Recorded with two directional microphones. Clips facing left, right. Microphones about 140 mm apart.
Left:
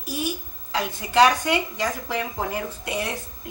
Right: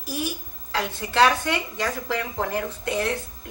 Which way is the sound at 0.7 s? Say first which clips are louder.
Left 2 dB; 15° left (ahead or behind).